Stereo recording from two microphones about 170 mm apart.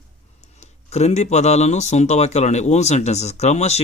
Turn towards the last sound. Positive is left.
turn(degrees=40)  # may be behind; listen again after turning